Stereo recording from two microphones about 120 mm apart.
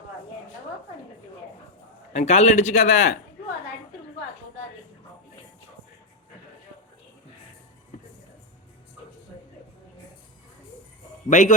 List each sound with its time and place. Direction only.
2.1 s a man's voice: 70° left (ahead or behind)
11.3 s a man's voice: 90° left